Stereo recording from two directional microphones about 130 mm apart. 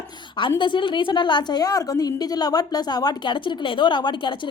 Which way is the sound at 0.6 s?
40° left (ahead or behind).